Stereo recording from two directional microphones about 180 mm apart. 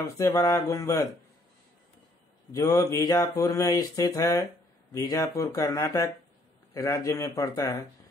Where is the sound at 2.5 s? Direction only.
20° left (ahead or behind).